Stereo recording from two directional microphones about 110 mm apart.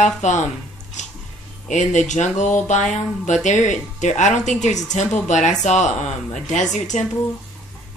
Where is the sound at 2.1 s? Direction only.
90° left.